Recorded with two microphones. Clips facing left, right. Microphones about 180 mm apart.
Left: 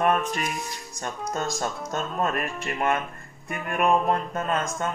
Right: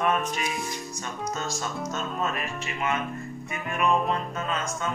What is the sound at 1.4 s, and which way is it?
Music, 50° left (ahead or behind).